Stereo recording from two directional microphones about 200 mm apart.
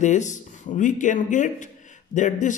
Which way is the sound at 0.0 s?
35° left (ahead or behind).